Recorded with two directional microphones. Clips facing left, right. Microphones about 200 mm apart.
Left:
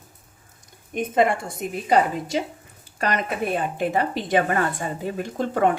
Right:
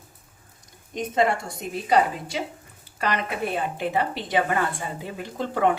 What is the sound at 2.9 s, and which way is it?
A woman's voice, 45° left (ahead or behind).